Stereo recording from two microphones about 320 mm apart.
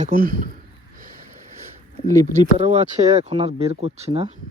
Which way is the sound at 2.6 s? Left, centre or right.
Centre.